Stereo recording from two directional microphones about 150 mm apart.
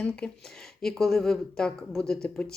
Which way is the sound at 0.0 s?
5° left (ahead or behind).